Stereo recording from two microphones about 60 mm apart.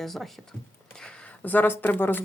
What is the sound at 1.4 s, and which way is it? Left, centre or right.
Speech, left.